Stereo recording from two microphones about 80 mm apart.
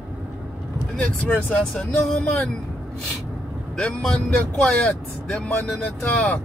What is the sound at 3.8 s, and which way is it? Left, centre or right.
Speech, centre.